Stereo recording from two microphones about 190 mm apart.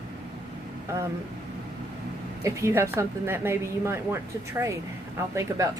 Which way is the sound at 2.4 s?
15° right (ahead or behind).